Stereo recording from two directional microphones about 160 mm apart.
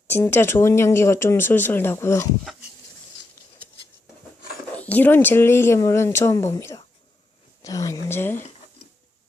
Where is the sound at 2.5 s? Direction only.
Centre (ahead or behind).